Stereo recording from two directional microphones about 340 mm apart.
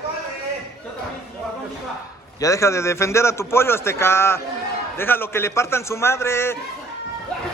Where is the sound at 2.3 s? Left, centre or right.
Centre.